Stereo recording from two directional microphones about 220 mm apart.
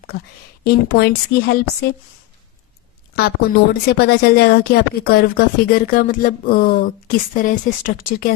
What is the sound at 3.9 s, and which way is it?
A woman's voice, 45° left (ahead or behind).